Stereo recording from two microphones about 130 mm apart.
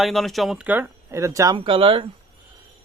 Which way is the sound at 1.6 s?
40° right (ahead or behind).